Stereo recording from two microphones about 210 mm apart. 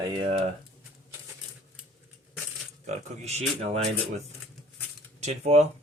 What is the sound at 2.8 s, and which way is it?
Speech, 35° right (ahead or behind).